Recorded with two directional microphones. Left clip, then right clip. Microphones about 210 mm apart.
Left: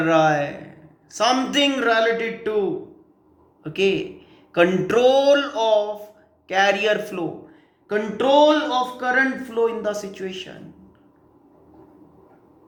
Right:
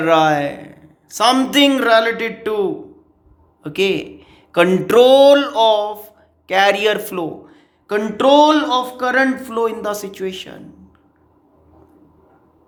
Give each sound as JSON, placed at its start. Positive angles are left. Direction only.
{"t": 0.0, "sound": "speech", "side_deg": -45}